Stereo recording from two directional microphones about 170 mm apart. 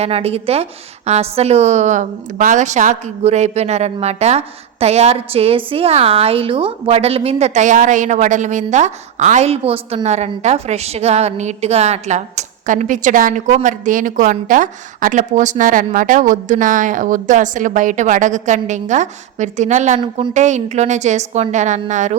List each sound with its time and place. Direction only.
0.0 s a woman's voice: 35° right (ahead or behind)
20.0 s a woman's voice: 30° right (ahead or behind)
20.3 s a woman's voice: 45° right (ahead or behind)